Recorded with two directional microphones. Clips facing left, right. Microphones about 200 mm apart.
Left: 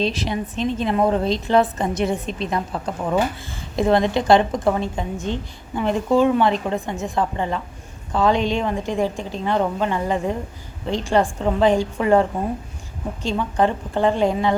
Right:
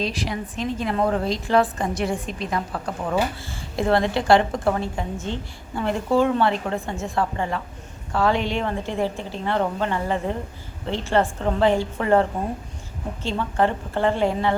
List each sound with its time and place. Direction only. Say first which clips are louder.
0.0 s a woman's voice: left 4 dB; 25° left (ahead or behind)
13.3 s a woman's voice: left 2 dB; 15° left (ahead or behind)